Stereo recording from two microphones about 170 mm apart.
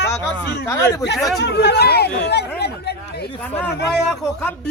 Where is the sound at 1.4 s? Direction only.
80° left.